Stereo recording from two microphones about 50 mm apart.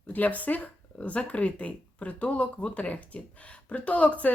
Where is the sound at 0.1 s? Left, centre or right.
Left.